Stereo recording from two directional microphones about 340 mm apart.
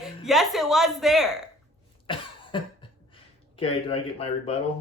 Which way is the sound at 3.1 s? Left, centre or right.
Centre.